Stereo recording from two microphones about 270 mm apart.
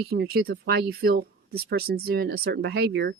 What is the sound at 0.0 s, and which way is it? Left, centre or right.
Speech, right.